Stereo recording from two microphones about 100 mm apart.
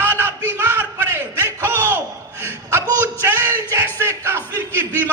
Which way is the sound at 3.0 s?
20° right (ahead or behind).